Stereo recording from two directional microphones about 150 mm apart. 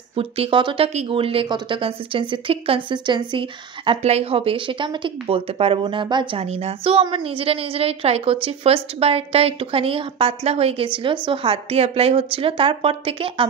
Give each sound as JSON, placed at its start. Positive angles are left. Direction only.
{"t": 0.1, "sound": "speech", "side_deg": -40}